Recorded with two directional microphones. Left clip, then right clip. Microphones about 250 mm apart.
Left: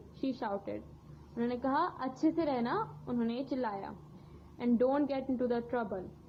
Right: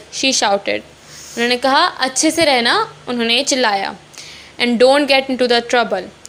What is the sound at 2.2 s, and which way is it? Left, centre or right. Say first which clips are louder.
A woman's voice: right 18 dB; left.